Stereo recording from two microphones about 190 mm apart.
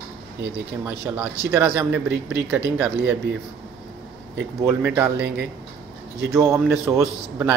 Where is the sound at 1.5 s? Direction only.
10° right (ahead or behind).